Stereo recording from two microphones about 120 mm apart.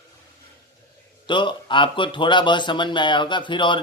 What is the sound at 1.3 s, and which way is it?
Speech, 40° left (ahead or behind).